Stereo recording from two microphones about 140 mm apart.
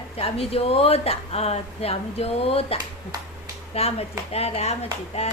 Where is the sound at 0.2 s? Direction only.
45° left (ahead or behind).